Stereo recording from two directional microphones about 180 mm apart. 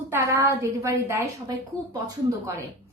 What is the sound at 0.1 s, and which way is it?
A woman's voice, 15° right (ahead or behind).